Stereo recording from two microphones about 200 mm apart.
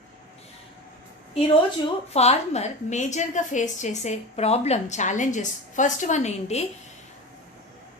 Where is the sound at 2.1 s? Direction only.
35° left (ahead or behind).